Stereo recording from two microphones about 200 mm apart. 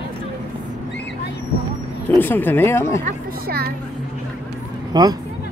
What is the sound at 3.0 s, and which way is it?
Speech, 50° right (ahead or behind).